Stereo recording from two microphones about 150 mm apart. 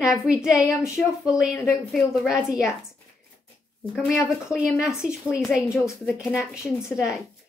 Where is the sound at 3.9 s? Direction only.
Centre (ahead or behind).